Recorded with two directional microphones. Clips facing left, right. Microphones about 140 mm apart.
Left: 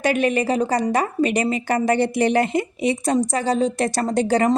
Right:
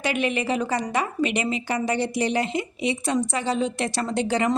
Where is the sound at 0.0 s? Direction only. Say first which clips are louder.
Left 5 dB; 45° left (ahead or behind).